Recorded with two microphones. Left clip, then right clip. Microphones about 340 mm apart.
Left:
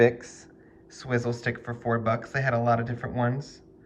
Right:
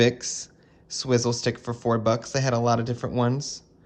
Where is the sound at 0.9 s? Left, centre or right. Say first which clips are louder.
Right 6 dB; centre.